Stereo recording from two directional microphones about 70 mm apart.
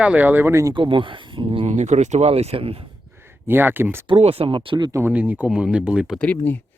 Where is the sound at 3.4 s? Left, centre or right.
Right.